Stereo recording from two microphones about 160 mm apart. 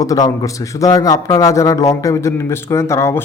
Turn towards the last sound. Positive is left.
turn(degrees=15)  # may be behind; listen again after turning